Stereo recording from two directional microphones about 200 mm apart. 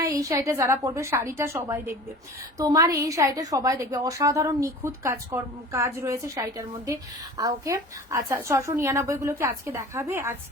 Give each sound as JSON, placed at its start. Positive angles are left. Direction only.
{"t": 0.0, "sound": "a woman's voice", "side_deg": -15}